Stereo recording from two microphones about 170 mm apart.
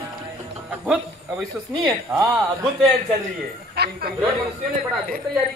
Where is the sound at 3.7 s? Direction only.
70° right (ahead or behind).